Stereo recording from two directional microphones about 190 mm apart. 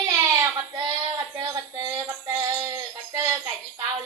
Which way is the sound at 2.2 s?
15° right (ahead or behind).